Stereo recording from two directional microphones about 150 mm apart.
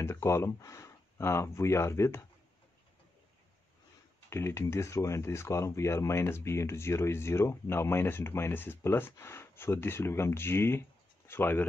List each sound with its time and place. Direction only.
0.0 s speech: 20° left (ahead or behind)
4.3 s speech: 15° left (ahead or behind)